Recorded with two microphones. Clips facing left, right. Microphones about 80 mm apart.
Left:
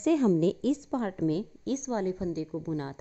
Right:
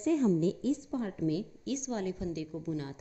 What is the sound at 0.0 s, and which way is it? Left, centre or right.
A woman's voice, left.